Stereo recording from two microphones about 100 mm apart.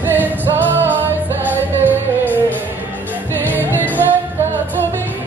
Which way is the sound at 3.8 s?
20° right (ahead or behind).